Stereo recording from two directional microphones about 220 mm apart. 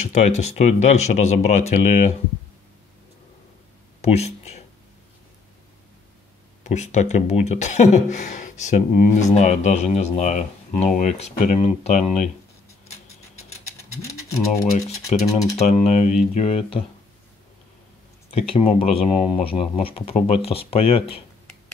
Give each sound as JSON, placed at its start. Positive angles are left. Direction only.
{"t": 0.1, "sound": "speech", "side_deg": 30}
{"t": 4.0, "sound": "speech", "side_deg": 30}
{"t": 6.6, "sound": "speech", "side_deg": 30}
{"t": 15.2, "sound": "speech", "side_deg": 15}
{"t": 15.6, "sound": "speech", "side_deg": 30}
{"t": 18.3, "sound": "speech", "side_deg": 25}